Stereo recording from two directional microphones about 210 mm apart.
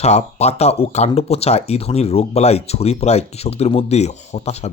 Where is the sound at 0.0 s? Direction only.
30° left (ahead or behind).